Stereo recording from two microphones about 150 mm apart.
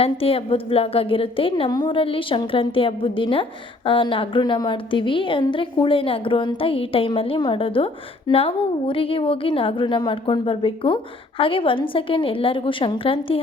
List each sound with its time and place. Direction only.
0.0 s a woman's voice: 40° left (ahead or behind)